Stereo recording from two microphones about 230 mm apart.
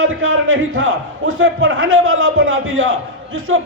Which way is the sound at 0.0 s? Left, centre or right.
Right.